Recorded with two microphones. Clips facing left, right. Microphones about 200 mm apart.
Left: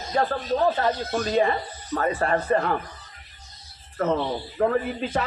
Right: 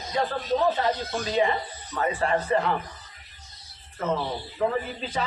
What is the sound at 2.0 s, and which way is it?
Speech, 45° left (ahead or behind).